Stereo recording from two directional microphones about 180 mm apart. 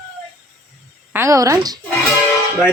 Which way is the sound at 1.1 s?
15° right (ahead or behind).